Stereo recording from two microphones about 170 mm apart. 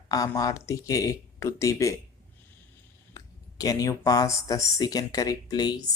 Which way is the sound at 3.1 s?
20° left (ahead or behind).